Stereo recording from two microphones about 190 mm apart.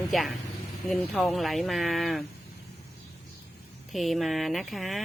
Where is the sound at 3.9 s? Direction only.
Centre (ahead or behind).